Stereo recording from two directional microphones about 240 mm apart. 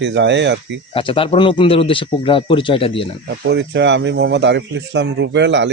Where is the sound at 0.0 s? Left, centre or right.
Right.